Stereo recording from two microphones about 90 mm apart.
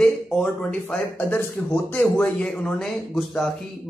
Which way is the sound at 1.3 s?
25° left (ahead or behind).